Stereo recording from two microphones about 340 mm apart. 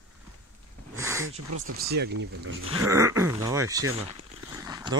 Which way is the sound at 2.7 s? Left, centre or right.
Centre.